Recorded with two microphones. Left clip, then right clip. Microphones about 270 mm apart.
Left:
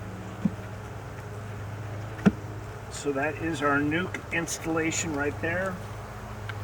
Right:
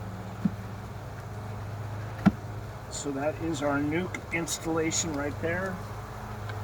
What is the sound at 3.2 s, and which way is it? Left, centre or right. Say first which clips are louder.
Speech: even; centre.